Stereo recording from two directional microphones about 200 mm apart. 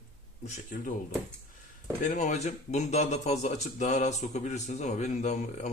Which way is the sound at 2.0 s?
35° left (ahead or behind).